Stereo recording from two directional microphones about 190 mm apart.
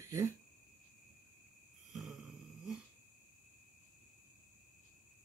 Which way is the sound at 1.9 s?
Centre (ahead or behind).